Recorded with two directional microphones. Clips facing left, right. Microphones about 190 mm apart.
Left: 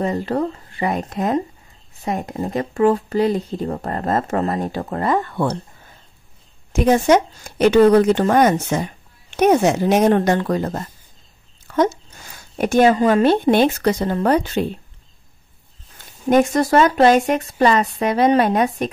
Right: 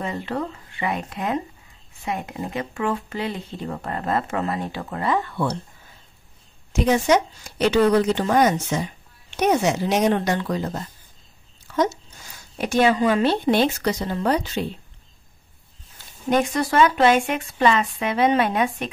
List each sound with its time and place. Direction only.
0.0 s speech: 40° left (ahead or behind)
6.7 s speech: 55° left (ahead or behind)
16.3 s speech: 45° left (ahead or behind)